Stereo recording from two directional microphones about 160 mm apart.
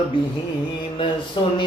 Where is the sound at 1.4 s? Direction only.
30° left (ahead or behind).